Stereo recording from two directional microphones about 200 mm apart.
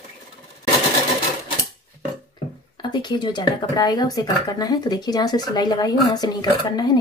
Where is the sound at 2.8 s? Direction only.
20° left (ahead or behind).